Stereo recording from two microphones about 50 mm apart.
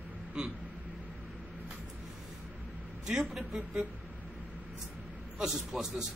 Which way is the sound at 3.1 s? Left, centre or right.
Centre.